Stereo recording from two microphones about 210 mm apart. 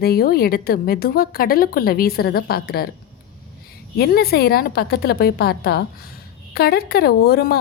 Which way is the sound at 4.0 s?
45° left (ahead or behind).